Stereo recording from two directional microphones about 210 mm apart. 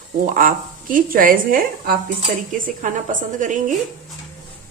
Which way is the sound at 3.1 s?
40° right (ahead or behind).